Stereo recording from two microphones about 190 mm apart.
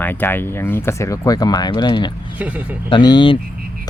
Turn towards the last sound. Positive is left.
turn(degrees=25)  # may be behind; listen again after turning